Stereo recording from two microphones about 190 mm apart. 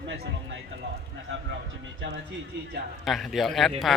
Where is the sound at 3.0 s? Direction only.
Centre (ahead or behind).